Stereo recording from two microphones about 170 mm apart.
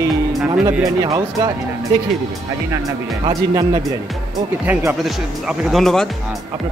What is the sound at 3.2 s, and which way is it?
Speech, 25° right (ahead or behind).